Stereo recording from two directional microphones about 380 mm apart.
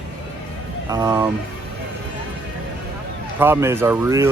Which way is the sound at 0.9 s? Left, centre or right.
Centre.